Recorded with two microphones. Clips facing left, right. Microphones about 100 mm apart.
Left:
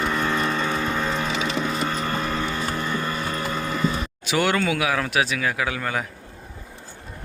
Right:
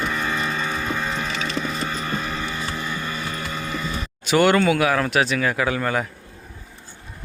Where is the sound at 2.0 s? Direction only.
45° left (ahead or behind).